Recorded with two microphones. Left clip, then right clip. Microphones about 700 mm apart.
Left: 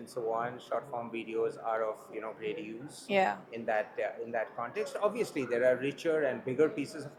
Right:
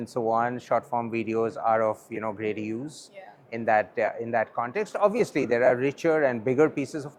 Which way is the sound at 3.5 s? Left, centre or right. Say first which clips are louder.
Right 9 dB; right.